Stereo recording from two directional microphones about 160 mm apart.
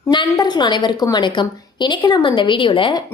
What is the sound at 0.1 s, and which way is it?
A woman's voice, 30° left (ahead or behind).